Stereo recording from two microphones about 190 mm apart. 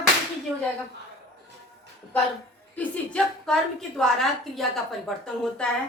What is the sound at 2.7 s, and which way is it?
A woman's voice, 5° left (ahead or behind).